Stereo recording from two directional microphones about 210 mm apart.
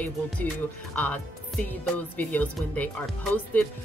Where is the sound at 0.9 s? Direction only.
5° left (ahead or behind).